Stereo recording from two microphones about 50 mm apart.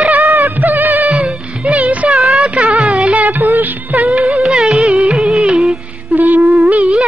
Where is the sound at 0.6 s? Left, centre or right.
Right.